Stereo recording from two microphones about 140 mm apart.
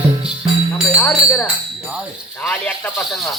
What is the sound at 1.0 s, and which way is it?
Speech, 20° left (ahead or behind).